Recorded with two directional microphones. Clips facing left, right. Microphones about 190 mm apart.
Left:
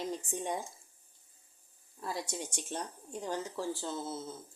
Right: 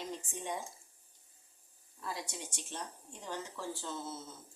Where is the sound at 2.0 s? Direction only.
40° left (ahead or behind).